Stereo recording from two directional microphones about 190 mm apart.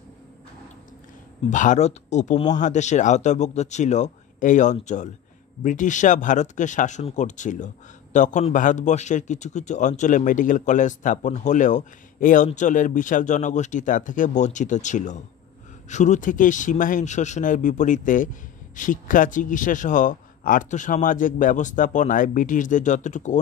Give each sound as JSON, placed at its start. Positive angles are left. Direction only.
{"t": 1.5, "sound": "speech", "side_deg": 40}